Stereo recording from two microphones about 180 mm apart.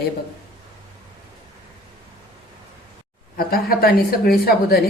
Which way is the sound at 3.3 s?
55° left (ahead or behind).